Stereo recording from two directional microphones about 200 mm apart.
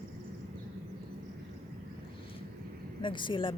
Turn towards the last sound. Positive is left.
turn(degrees=25)  # may be behind; listen again after turning